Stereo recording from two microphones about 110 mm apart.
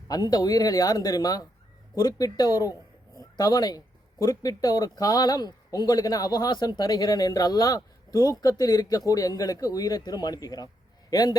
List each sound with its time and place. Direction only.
0.1 s a man's voice: 35° left (ahead or behind)